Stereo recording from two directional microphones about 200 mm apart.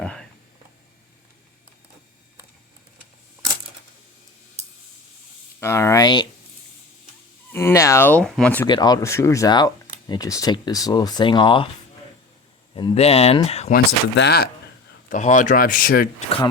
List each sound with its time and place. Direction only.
0.0 s a sound: 5° left (ahead or behind)
5.5 s speech: 10° left (ahead or behind)
7.5 s speech: 10° left (ahead or behind)
8.6 s speech: 20° left (ahead or behind)
12.7 s speech: 25° left (ahead or behind)
13.7 s speech: 55° left (ahead or behind)
15.1 s speech: 40° left (ahead or behind)